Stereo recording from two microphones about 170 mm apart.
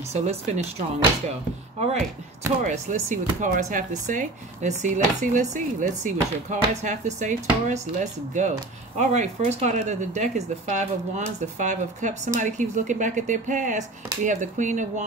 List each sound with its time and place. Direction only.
0.1 s speech: 40° right (ahead or behind)